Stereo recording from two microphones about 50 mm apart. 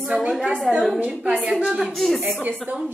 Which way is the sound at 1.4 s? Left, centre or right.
Right.